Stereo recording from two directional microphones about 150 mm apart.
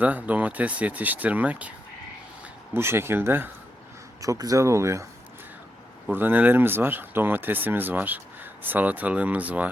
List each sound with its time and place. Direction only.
0.0 s speech: 10° right (ahead or behind)
2.7 s speech: 15° right (ahead or behind)
6.1 s speech: 10° right (ahead or behind)